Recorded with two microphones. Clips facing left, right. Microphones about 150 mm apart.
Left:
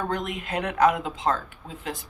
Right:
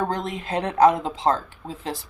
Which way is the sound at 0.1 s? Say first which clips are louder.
Right 2 dB; 30° right (ahead or behind).